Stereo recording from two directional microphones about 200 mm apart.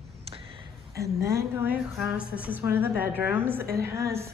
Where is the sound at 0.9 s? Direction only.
15° right (ahead or behind).